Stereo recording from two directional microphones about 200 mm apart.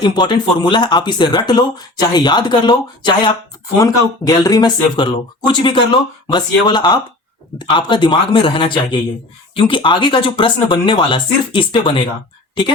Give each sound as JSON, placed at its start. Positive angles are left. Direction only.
{"t": 0.0, "sound": "speech", "side_deg": 20}